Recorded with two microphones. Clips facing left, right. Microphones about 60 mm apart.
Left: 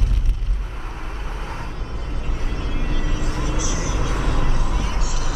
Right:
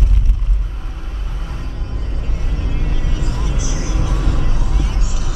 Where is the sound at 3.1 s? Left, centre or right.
Centre.